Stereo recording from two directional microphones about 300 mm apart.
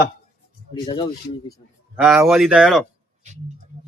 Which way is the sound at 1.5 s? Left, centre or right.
Centre.